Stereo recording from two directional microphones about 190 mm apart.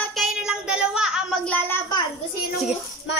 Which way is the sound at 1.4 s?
10° left (ahead or behind).